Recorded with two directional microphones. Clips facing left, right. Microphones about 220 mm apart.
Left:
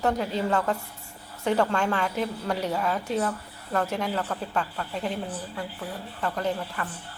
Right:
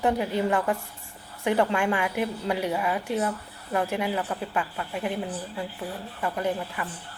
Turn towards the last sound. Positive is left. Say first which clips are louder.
# right 1 dB
turn(degrees=-10)  # may be behind; listen again after turning